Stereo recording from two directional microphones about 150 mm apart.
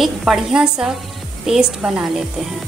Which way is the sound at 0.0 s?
5° right (ahead or behind).